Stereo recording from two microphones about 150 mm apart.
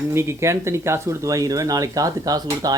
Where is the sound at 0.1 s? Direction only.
20° right (ahead or behind).